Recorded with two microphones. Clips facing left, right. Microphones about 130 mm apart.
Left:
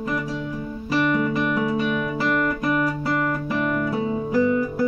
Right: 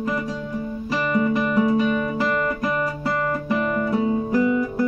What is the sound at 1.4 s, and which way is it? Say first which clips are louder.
Music: right 3 dB; centre (ahead or behind).